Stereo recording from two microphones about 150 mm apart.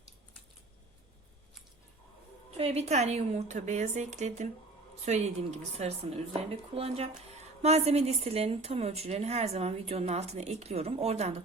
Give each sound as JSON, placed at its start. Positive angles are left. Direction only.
{"t": 2.6, "sound": "a woman's voice", "side_deg": -45}